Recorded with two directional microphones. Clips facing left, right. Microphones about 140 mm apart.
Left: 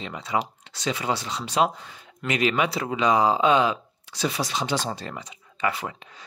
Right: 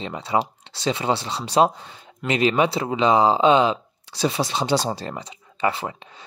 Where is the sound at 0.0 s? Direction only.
30° right (ahead or behind).